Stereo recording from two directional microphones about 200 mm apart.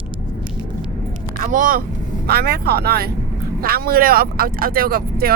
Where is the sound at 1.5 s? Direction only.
45° right (ahead or behind).